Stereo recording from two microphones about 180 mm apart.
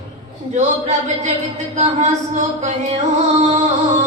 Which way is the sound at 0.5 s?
40° right (ahead or behind).